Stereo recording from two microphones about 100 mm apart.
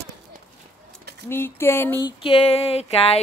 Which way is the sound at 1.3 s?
25° left (ahead or behind).